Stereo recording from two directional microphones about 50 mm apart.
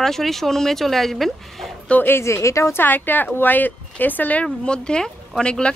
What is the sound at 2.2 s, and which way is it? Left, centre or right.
Speech, left.